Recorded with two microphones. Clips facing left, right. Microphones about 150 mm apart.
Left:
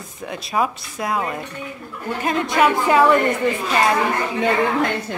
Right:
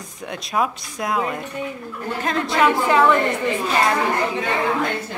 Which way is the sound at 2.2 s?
15° left (ahead or behind).